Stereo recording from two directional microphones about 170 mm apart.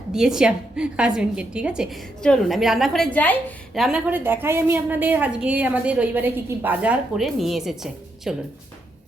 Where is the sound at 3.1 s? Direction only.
10° left (ahead or behind).